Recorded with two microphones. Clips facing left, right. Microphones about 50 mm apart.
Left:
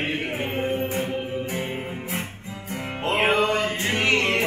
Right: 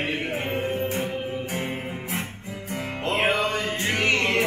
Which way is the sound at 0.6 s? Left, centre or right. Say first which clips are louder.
Left 1 dB; left.